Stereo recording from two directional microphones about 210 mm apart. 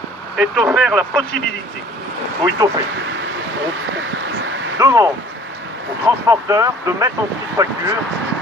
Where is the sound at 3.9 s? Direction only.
60° right (ahead or behind).